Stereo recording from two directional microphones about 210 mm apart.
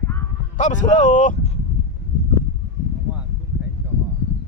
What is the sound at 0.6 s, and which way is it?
Speech, 35° left (ahead or behind).